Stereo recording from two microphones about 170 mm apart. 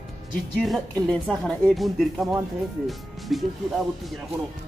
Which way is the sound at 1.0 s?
Centre (ahead or behind).